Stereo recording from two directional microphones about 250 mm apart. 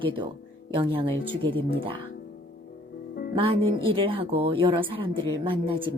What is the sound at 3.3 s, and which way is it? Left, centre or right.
A woman's voice, right.